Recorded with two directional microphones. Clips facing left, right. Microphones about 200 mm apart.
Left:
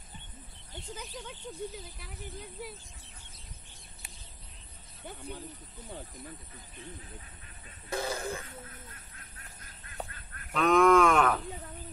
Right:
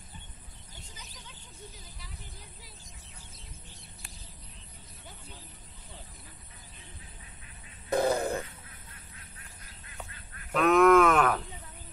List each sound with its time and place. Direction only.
2.0 s speech: 55° left (ahead or behind)
5.0 s speech: 60° left (ahead or behind)
7.9 s a sound: 55° right (ahead or behind)
8.5 s duck: 45° left (ahead or behind)
10.5 s cattle: 5° right (ahead or behind)